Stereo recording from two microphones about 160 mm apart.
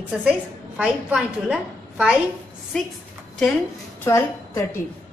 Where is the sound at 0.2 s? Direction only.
5° right (ahead or behind).